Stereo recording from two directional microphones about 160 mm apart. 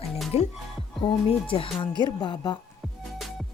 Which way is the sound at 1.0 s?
35° left (ahead or behind).